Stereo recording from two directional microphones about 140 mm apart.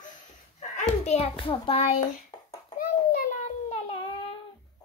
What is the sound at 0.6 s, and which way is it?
A child's voice, 55° left (ahead or behind).